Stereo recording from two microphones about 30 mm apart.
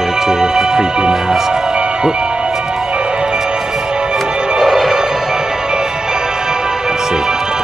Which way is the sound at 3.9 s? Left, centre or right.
Right.